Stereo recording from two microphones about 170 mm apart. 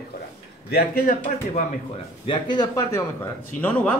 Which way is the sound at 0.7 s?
55° left (ahead or behind).